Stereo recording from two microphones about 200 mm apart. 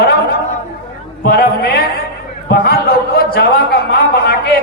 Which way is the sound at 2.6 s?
50° left (ahead or behind).